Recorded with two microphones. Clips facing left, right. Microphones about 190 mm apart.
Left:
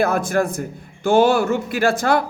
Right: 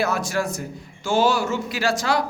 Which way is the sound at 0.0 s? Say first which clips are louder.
Left 5 dB; 55° left (ahead or behind).